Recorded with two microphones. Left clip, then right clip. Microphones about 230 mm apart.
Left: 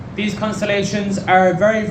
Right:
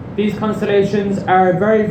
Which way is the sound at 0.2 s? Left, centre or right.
Left.